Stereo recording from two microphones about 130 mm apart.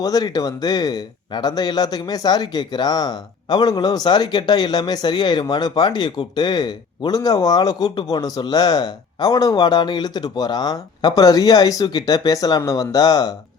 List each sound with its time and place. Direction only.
0.0 s speech: 30° left (ahead or behind)